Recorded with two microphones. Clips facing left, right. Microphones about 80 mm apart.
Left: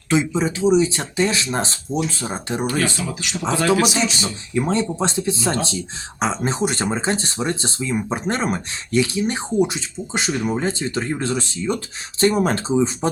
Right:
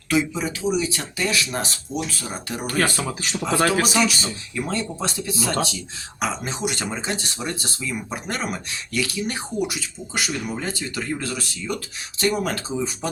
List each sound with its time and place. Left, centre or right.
0.1 s speech: left
2.7 s speech: right
3.9 s speech: left